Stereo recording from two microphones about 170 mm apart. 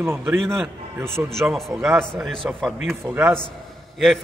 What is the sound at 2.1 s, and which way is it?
Speech, centre (ahead or behind).